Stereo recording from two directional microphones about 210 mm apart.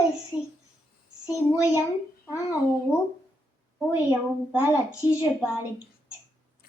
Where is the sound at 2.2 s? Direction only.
15° left (ahead or behind).